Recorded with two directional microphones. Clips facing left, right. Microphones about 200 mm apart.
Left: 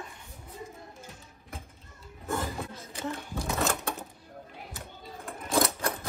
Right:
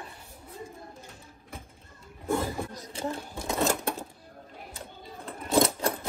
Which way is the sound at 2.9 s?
35° right (ahead or behind).